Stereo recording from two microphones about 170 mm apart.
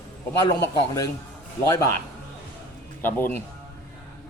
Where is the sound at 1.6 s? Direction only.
20° left (ahead or behind).